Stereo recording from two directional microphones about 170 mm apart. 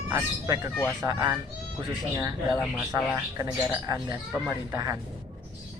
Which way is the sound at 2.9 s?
15° right (ahead or behind).